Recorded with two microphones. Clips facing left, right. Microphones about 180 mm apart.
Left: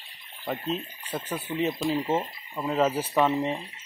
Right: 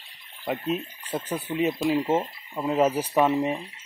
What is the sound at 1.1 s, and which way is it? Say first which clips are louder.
Speech: right 3 dB; 15° right (ahead or behind).